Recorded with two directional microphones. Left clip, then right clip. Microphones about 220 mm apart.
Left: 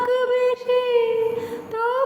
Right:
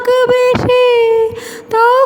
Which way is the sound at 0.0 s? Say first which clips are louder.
Right 9 dB; 45° right (ahead or behind).